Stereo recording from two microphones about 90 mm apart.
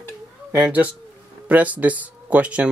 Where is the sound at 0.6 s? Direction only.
15° right (ahead or behind).